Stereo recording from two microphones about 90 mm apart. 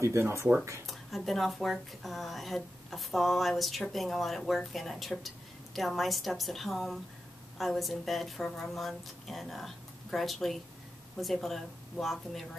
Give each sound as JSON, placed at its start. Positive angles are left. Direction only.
{"t": 0.0, "sound": "speech", "side_deg": -30}
{"t": 0.8, "sound": "speech", "side_deg": 0}